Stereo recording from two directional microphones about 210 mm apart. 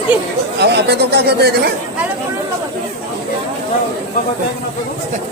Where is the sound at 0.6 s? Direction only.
55° right (ahead or behind).